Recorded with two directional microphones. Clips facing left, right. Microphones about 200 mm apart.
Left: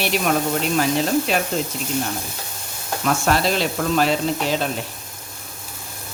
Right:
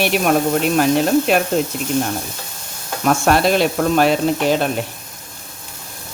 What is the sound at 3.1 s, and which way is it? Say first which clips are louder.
Speech: right 5 dB; 55° right (ahead or behind).